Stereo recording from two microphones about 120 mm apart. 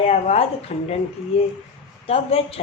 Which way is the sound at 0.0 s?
60° left (ahead or behind).